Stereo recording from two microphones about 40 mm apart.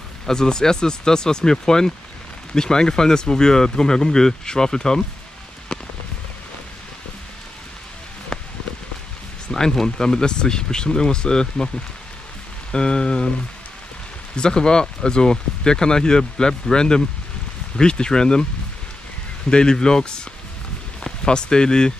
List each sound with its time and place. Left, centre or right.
0.3 s speech: centre
8.3 s a sound: centre
9.5 s speech: centre
12.7 s speech: left
14.3 s speech: left
19.5 s speech: centre